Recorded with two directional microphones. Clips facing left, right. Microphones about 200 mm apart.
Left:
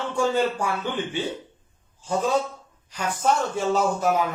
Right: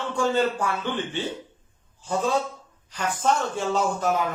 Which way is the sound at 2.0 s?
10° left (ahead or behind).